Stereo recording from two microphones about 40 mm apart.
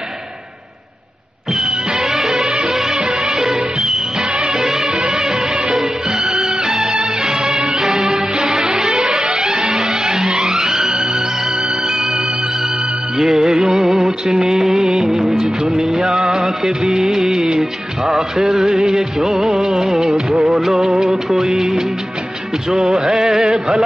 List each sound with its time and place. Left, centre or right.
2.0 s music: centre
14.3 s music of bollywood: centre
19.6 s music of bollywood: centre
19.9 s music of bollywood: centre
21.1 s music of bollywood: centre
22.9 s a sound: centre